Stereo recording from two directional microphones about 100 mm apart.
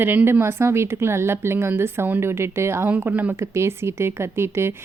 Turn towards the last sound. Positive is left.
turn(degrees=-25)  # may be behind; listen again after turning